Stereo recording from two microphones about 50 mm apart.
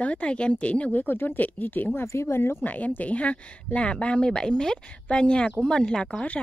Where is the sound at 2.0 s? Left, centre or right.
Left.